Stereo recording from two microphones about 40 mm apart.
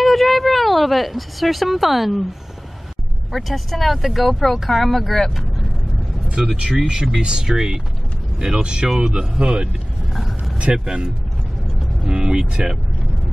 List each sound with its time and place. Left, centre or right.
0.0 s speech: centre
3.3 s speech: centre
6.2 s speech: right
8.8 s speech: centre
9.4 s speech: right
10.1 s vehicle: centre
10.7 s speech: centre
12.1 s speech: right